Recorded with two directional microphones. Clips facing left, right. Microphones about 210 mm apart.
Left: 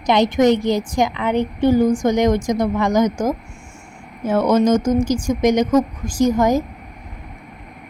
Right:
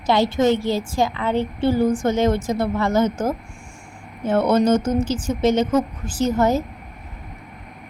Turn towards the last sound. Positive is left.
turn(degrees=15)  # may be behind; listen again after turning